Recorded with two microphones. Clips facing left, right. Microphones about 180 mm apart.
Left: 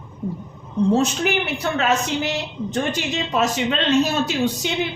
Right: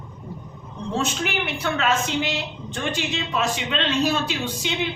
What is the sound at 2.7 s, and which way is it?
A woman's voice, 40° left (ahead or behind).